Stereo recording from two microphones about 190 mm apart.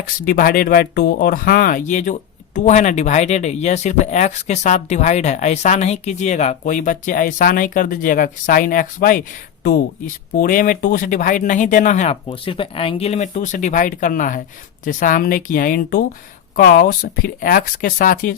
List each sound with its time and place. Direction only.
0.2 s speech: 50° left (ahead or behind)
10.3 s speech: 45° left (ahead or behind)